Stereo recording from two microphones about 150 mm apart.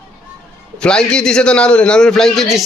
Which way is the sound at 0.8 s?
5° left (ahead or behind).